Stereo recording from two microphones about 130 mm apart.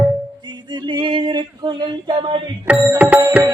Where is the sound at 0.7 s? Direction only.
35° right (ahead or behind).